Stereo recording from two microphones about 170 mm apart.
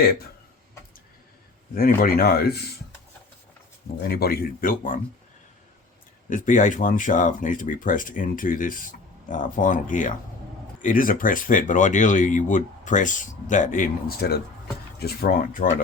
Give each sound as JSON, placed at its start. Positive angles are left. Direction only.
{"t": 1.7, "sound": "speech", "side_deg": 60}
{"t": 4.1, "sound": "speech", "side_deg": 65}
{"t": 6.3, "sound": "speech", "side_deg": 50}